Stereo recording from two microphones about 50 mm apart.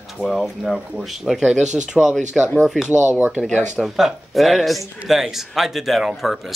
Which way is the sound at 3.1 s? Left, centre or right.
Right.